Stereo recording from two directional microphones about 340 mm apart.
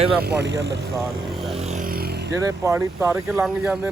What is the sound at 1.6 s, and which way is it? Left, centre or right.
Vehicle, right.